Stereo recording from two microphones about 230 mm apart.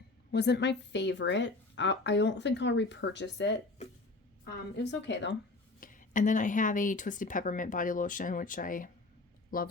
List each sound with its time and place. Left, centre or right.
0.3 s a woman's voice: left
4.8 s a woman's voice: left
5.8 s a woman's voice: left